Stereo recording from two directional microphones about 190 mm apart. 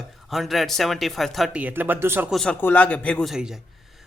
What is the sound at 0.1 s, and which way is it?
Speech, centre (ahead or behind).